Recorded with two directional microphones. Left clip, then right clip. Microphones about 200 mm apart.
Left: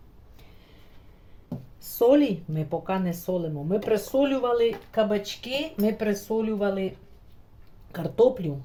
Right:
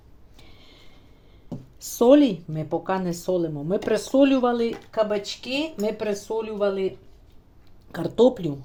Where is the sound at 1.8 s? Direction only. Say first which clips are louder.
Right 3 dB; 40° right (ahead or behind).